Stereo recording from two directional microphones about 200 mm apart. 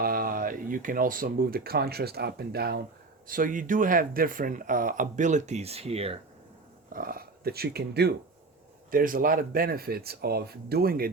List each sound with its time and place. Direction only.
0.0 s speech: 45° right (ahead or behind); by 6.1 s 30° right (ahead or behind)
6.9 s speech: 45° right (ahead or behind)